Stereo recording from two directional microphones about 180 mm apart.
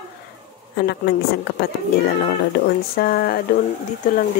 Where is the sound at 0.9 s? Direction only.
65° left (ahead or behind).